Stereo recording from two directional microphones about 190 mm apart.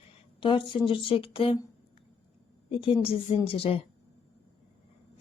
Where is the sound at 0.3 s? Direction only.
25° left (ahead or behind).